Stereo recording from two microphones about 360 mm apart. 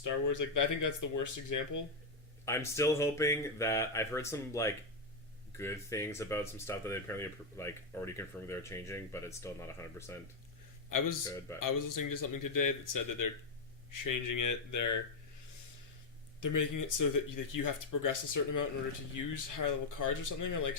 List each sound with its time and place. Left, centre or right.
0.0 s speech: left
2.4 s speech: centre
11.3 s speech: centre
11.6 s speech: left
16.4 s speech: left